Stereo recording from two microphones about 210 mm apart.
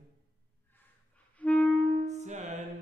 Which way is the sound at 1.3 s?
5° left (ahead or behind).